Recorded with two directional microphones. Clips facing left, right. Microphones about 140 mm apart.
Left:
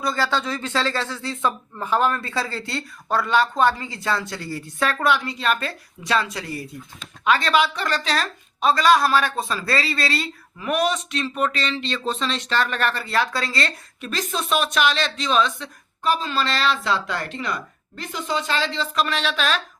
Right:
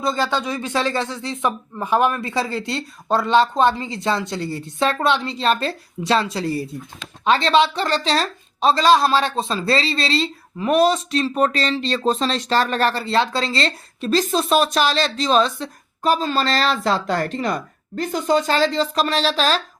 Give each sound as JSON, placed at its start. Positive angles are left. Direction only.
{"t": 0.0, "sound": "a woman's voice", "side_deg": -20}